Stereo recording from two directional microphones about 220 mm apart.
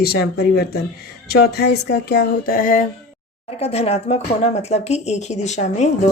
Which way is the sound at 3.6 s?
30° left (ahead or behind).